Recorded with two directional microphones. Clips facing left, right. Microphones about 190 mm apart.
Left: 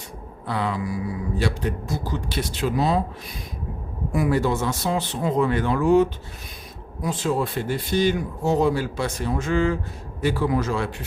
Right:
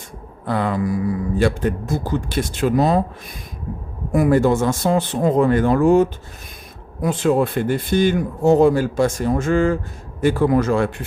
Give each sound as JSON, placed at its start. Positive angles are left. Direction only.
{"t": 0.4, "sound": "speech", "side_deg": -50}
{"t": 4.1, "sound": "speech", "side_deg": -50}
{"t": 7.0, "sound": "speech", "side_deg": -60}